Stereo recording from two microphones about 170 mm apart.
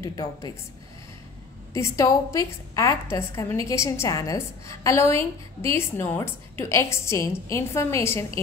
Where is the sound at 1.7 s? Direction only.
15° left (ahead or behind).